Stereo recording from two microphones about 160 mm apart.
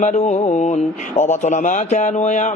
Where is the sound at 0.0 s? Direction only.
45° left (ahead or behind).